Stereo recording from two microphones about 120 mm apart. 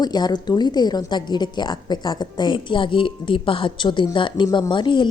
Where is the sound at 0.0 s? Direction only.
35° left (ahead or behind).